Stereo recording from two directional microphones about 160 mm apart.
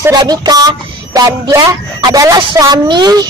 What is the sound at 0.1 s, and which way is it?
Speech, 25° right (ahead or behind).